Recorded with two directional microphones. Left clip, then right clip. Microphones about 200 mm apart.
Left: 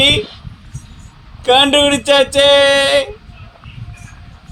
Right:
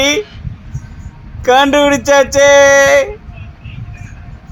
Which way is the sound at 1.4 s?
30° right (ahead or behind).